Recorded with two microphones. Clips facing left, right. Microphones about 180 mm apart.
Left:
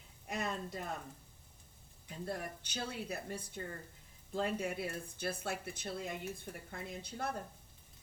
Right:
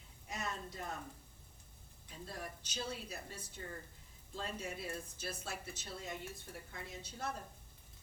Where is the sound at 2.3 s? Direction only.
60° left (ahead or behind).